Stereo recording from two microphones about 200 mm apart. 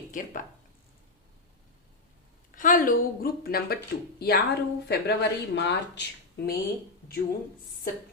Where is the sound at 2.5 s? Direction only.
40° left (ahead or behind); by 6.0 s 60° left (ahead or behind).